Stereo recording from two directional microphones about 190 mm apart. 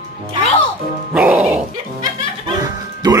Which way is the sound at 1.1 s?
10° right (ahead or behind).